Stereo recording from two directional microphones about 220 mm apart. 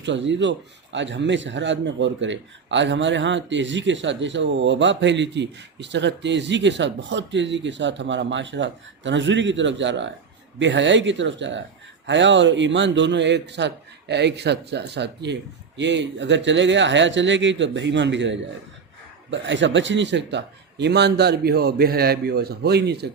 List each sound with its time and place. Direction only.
0.0 s a man's voice: 55° right (ahead or behind)